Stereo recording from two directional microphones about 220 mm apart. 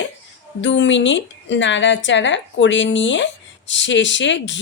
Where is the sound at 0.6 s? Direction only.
55° left (ahead or behind).